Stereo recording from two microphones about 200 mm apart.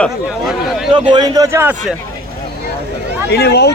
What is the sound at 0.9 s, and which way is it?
A man's voice, 25° right (ahead or behind).